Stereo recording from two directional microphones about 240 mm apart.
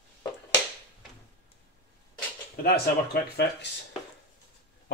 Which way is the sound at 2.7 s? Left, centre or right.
Left.